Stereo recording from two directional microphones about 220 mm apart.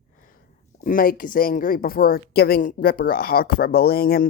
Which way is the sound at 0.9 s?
40° left (ahead or behind).